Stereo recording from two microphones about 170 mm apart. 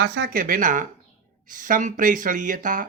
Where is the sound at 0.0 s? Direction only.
90° right.